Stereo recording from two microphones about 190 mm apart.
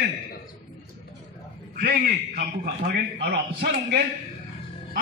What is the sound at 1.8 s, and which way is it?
A man's voice, 55° right (ahead or behind).